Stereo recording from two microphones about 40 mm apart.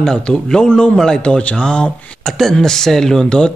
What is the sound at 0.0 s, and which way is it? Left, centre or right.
Speech, centre.